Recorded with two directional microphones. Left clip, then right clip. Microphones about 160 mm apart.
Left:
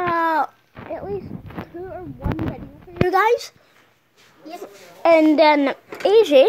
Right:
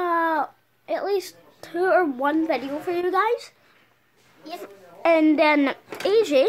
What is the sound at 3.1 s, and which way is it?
Speech, 20° left (ahead or behind).